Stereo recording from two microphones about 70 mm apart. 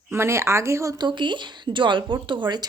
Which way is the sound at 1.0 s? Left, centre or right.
Right.